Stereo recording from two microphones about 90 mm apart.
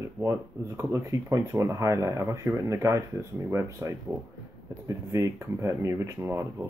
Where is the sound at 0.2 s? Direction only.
30° right (ahead or behind).